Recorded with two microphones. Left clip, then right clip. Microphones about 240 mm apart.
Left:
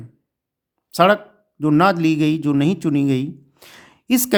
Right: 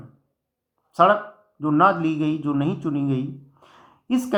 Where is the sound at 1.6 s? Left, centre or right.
Left.